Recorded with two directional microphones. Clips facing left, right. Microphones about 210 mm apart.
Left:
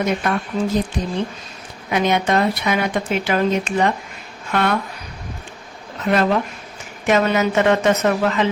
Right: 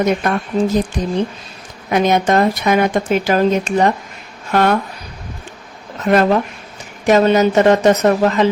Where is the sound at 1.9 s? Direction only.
45° right (ahead or behind).